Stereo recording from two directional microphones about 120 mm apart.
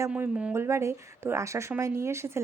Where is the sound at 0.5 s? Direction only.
25° right (ahead or behind).